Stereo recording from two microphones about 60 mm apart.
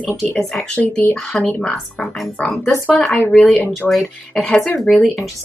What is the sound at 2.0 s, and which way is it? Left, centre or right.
Speech, centre.